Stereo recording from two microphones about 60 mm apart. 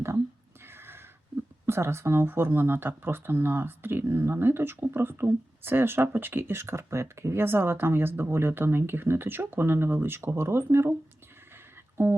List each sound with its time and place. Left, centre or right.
0.7 s a sound: right
1.6 s speech: right
12.0 s speech: right